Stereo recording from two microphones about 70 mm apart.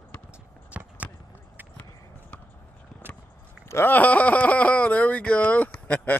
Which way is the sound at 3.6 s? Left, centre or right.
Left.